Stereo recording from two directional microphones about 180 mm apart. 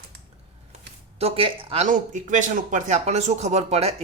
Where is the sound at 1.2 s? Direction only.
35° right (ahead or behind).